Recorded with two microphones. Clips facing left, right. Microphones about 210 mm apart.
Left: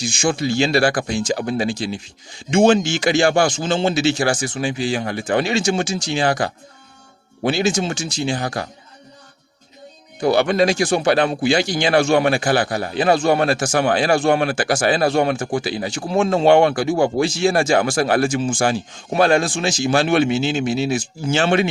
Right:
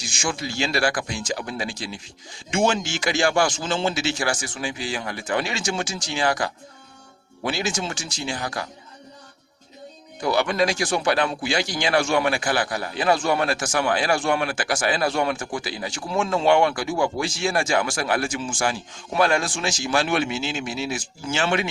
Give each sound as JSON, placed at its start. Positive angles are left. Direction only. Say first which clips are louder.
{"t": 0.2, "sound": "a man's voice", "louder": "left 8 dB", "side_deg": 30}
{"t": 10.2, "sound": "a man's voice", "louder": "left 6 dB", "side_deg": 25}